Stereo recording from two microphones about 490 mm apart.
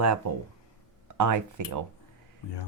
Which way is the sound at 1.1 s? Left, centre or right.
Right.